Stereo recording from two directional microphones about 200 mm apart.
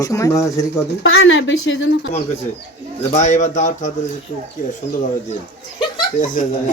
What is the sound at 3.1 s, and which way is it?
Speech, 35° left (ahead or behind).